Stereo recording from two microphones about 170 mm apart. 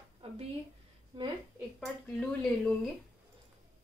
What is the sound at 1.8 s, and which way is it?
Speech, 5° left (ahead or behind).